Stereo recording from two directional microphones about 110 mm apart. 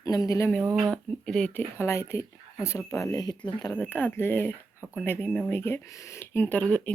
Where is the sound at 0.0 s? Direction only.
35° left (ahead or behind).